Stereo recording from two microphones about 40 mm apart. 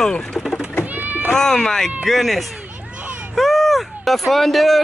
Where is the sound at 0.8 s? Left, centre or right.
Right.